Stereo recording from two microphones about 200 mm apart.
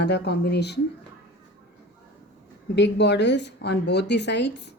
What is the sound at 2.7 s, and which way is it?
A woman's voice, 60° left (ahead or behind).